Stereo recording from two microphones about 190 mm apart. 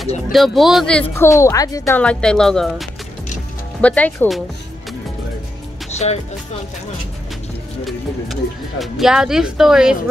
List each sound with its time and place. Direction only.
0.3 s speech: centre (ahead or behind)
1.1 s a woman's voice: 15° left (ahead or behind)
2.0 s a woman's voice: 5° left (ahead or behind)
5.9 s music: 35° left (ahead or behind)
7.8 s speech: centre (ahead or behind)